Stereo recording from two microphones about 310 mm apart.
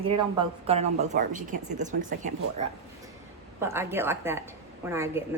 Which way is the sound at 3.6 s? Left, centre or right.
Centre.